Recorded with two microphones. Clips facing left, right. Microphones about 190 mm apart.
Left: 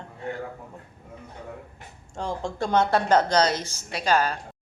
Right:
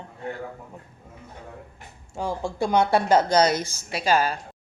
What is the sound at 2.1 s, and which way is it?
Speech, 10° right (ahead or behind).